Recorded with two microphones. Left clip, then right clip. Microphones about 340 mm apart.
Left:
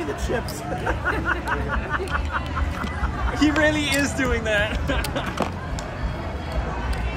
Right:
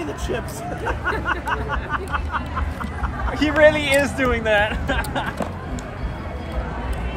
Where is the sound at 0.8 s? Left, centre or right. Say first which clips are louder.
Right 1 dB; centre.